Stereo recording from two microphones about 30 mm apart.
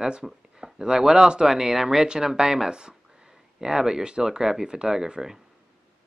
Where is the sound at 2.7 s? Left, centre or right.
Right.